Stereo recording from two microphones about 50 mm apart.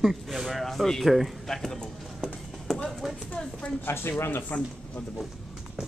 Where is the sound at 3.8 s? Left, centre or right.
Left.